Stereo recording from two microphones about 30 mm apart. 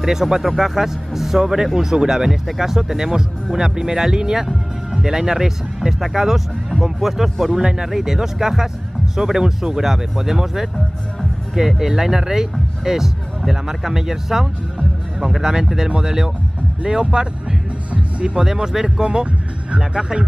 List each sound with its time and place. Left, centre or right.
0.0 s speech: centre
7.6 s speech: right
15.4 s speech: centre